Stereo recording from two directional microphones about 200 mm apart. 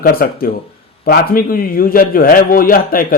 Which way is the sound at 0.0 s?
45° left (ahead or behind).